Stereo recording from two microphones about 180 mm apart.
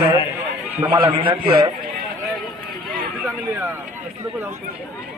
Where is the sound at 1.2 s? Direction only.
30° right (ahead or behind).